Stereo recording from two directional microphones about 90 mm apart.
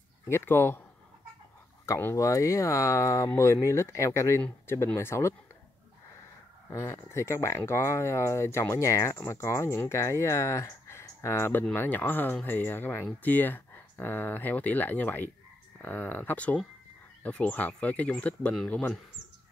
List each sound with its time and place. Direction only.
0.3 s speech: 25° left (ahead or behind)
2.1 s speech: 35° left (ahead or behind)
6.7 s speech: 35° left (ahead or behind)
9.4 s speech: 30° left (ahead or behind)